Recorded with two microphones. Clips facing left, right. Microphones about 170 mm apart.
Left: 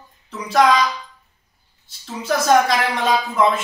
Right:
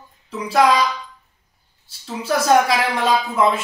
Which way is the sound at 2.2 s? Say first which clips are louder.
Even; 5° right (ahead or behind).